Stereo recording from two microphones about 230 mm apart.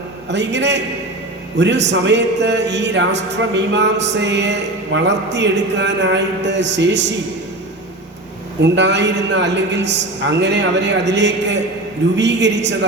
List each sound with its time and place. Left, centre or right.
0.3 s music: right
8.7 s music: right